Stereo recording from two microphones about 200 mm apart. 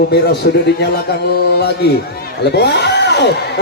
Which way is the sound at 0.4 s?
55° left (ahead or behind).